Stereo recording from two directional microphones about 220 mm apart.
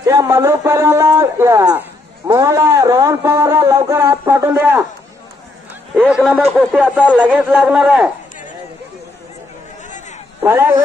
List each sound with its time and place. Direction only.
0.0 s a sound: 15° right (ahead or behind)
5.9 s a man's voice: centre (ahead or behind)
9.8 s chatter: 35° left (ahead or behind)
10.4 s a woman's voice: 10° right (ahead or behind)